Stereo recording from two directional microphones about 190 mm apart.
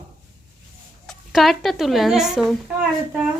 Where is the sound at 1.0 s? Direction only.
Centre (ahead or behind).